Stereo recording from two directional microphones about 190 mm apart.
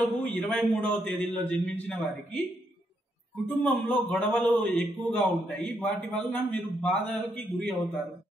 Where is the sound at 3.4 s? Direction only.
5° left (ahead or behind).